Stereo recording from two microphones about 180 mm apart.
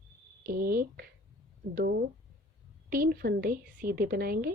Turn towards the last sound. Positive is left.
turn(degrees=-55)  # may be behind; listen again after turning